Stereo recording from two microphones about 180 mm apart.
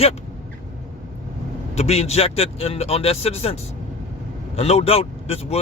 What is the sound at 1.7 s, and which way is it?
Speech, 35° left (ahead or behind).